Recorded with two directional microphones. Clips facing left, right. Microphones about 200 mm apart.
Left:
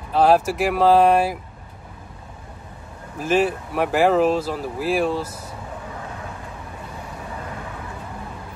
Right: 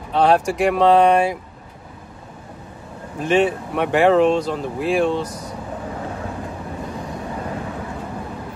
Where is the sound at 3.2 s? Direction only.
Centre (ahead or behind).